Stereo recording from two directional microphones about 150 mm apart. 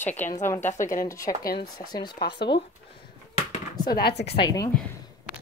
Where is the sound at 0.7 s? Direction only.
60° left (ahead or behind).